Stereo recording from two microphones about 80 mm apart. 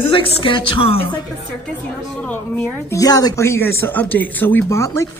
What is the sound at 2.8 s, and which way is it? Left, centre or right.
Speech, left.